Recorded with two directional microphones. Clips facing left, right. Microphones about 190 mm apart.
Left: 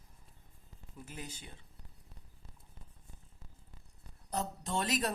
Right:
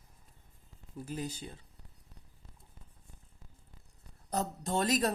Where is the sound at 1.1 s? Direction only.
35° right (ahead or behind).